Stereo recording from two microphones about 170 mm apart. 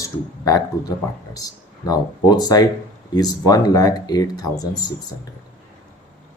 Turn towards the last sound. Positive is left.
turn(degrees=25)  # may be behind; listen again after turning